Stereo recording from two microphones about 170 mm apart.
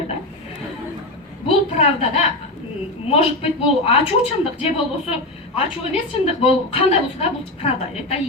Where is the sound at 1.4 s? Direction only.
35° left (ahead or behind).